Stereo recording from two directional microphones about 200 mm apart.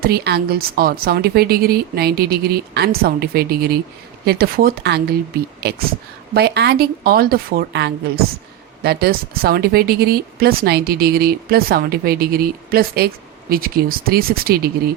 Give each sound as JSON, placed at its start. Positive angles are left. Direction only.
{"t": 0.0, "sound": "speech", "side_deg": -50}